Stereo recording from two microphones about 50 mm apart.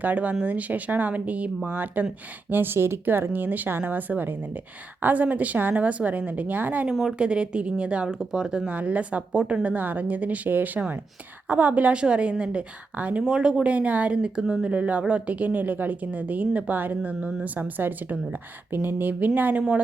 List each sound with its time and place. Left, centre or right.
0.0 s a woman's voice: right
6.9 s a woman's voice: centre
7.2 s a woman's voice: centre
8.7 s a woman's voice: right
13.2 s a woman's voice: centre
14.2 s speech: centre
14.7 s a woman's voice: right